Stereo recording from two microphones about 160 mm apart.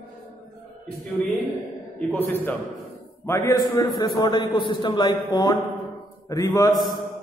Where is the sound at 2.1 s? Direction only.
15° left (ahead or behind).